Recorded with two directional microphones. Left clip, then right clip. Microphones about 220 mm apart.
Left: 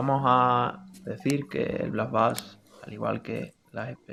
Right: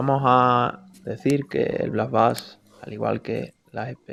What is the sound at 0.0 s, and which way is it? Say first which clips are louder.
Speech: right 4 dB; 25° right (ahead or behind).